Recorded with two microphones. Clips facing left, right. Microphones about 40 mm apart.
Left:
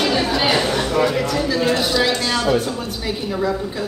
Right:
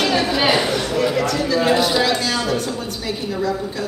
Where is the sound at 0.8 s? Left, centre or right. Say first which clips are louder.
Left 2 dB; left.